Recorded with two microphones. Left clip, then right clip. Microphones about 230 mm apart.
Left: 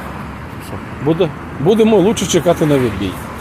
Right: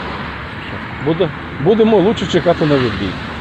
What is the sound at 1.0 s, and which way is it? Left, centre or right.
Speech, left.